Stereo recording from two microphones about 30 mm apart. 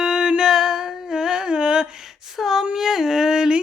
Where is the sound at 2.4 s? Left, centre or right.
Centre; by 3.6 s right.